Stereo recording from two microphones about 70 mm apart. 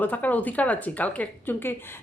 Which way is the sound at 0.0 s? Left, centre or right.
Left.